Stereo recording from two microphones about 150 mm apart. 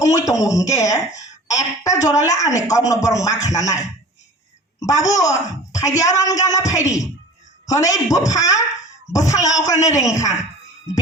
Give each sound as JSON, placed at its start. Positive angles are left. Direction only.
{"t": 0.0, "sound": "speech", "side_deg": 20}